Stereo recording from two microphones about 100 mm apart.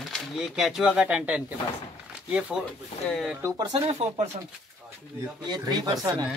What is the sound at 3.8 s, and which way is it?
Speech, 90° right.